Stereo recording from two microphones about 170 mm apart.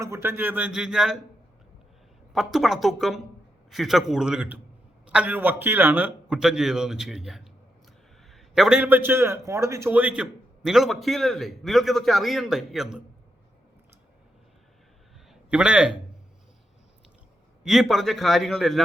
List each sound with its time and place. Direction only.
0.0 s speech: 15° right (ahead or behind)
2.3 s a man's voice: centre (ahead or behind)
15.3 s a man's voice: 5° right (ahead or behind)
17.6 s a man's voice: centre (ahead or behind)